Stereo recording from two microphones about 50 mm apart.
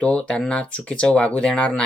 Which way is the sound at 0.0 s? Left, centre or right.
Left.